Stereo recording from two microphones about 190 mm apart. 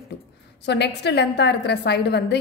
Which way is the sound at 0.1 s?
60° left (ahead or behind).